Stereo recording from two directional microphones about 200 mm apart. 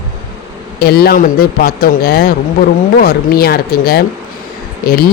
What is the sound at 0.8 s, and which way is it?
Speech, 50° left (ahead or behind).